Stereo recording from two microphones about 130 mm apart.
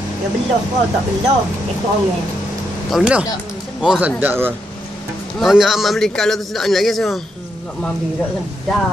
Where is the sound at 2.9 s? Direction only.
5° right (ahead or behind).